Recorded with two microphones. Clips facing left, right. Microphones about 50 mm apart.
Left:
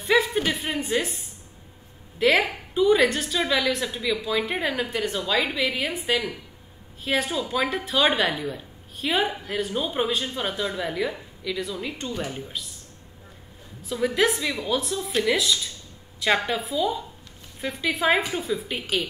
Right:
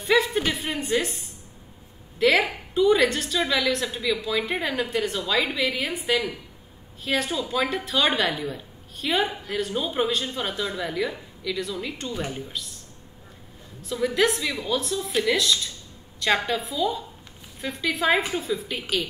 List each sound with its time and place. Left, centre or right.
0.0 s a woman's voice: centre
13.8 s a woman's voice: centre